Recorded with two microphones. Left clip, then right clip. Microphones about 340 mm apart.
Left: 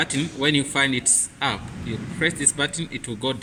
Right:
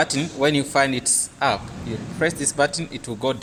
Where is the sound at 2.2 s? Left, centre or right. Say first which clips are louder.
Right 3 dB; centre.